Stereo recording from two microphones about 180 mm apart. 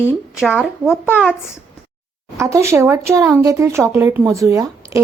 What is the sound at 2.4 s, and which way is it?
Speech, 15° right (ahead or behind).